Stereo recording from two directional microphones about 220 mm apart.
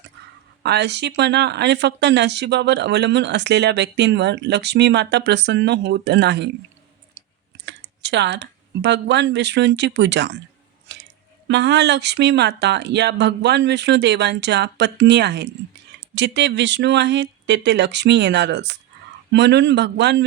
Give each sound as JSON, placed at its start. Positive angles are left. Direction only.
{"t": 0.6, "sound": "speech", "side_deg": -50}
{"t": 7.6, "sound": "speech", "side_deg": -50}
{"t": 10.9, "sound": "squish", "side_deg": -50}
{"t": 11.4, "sound": "speech", "side_deg": -50}